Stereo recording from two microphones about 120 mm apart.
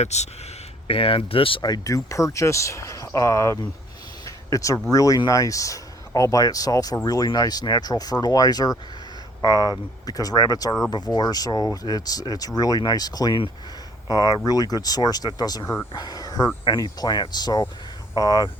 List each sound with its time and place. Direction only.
0.0 s speech: 65° left (ahead or behind)
0.9 s speech: 50° left (ahead or behind)
1.6 s speech: 30° left (ahead or behind)
15.6 s speech: 20° left (ahead or behind)
15.9 s speech: 35° left (ahead or behind)